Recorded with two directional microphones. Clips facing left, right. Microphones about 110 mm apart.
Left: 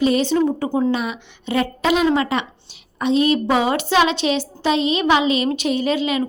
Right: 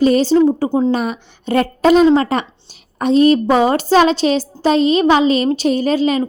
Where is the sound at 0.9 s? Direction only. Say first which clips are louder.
Right 4 dB; 40° right (ahead or behind).